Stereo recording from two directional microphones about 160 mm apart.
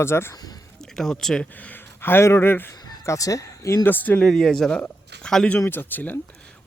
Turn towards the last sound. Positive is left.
turn(degrees=10)  # may be behind; listen again after turning